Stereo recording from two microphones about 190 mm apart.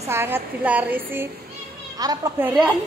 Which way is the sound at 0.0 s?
10° right (ahead or behind).